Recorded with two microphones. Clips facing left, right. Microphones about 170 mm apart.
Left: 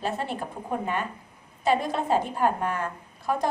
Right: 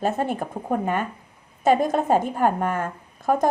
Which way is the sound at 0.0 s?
50° right (ahead or behind).